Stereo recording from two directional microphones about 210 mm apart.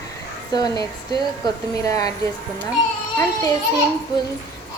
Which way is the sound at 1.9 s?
15° left (ahead or behind).